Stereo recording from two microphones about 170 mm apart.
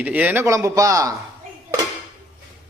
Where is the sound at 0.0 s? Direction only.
10° right (ahead or behind).